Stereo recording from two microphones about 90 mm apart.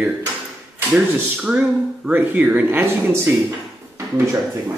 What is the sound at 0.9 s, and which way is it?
Speech, 10° right (ahead or behind).